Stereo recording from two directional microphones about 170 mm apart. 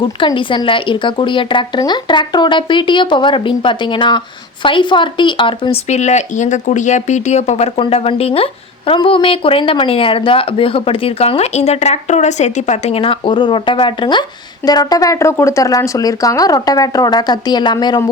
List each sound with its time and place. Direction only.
0.0 s speech: 30° left (ahead or behind)